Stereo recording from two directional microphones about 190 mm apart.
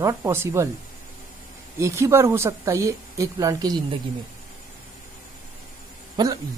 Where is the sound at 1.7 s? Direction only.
15° right (ahead or behind).